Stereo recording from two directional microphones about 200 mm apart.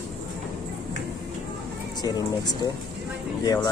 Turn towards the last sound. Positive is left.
turn(degrees=20)  # may be behind; listen again after turning